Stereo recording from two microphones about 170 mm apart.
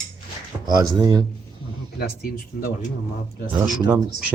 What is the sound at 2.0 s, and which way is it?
Speech, 60° left (ahead or behind).